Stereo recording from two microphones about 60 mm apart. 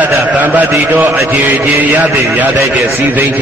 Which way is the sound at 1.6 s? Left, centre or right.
Right.